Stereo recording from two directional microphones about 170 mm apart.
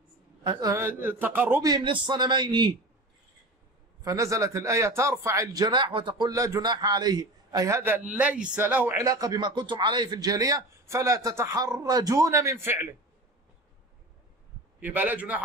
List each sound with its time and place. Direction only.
0.4 s a woman's voice: 25° right (ahead or behind)
1.6 s a man's voice: 25° right (ahead or behind)
4.0 s a man's voice: 20° right (ahead or behind)
14.8 s a woman's voice: 10° right (ahead or behind)